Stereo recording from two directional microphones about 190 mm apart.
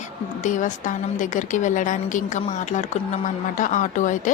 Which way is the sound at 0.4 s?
40° left (ahead or behind).